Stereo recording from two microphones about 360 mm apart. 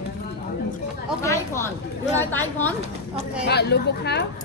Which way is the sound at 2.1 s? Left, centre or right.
Centre.